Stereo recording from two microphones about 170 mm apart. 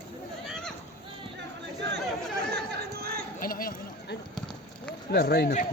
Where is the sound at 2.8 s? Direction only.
65° right (ahead or behind).